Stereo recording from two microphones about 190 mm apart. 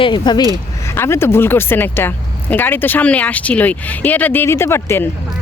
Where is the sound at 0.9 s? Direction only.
15° left (ahead or behind).